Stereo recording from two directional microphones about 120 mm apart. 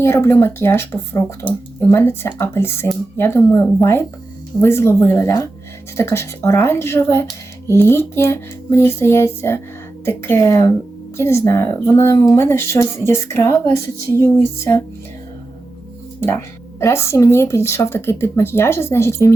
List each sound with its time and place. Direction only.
0.0 s speech: 20° left (ahead or behind)
16.8 s speech: 20° left (ahead or behind)